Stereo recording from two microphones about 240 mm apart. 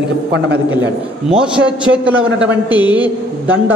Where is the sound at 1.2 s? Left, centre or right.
Centre.